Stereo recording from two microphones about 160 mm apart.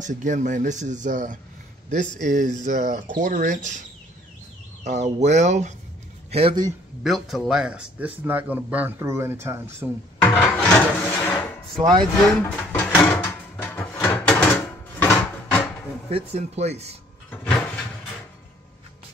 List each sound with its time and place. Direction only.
0.0 s speech: 50° right (ahead or behind)
4.8 s speech: 45° right (ahead or behind)
6.3 s speech: 35° right (ahead or behind)
7.0 s speech: centre (ahead or behind)
10.2 s a sound: 10° left (ahead or behind)
11.7 s speech: 25° right (ahead or behind)
12.0 s drawer open or close: 10° left (ahead or behind)
15.0 s a sound: 15° left (ahead or behind)
16.1 s speech: 40° right (ahead or behind)
17.3 s cupboard open or close: 5° left (ahead or behind)